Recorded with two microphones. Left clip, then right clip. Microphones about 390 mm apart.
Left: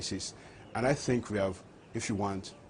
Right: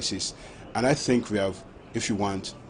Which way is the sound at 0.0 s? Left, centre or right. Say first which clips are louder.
Right 8 dB; left.